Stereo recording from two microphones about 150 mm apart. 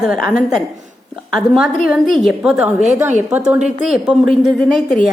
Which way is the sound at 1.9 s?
Centre (ahead or behind).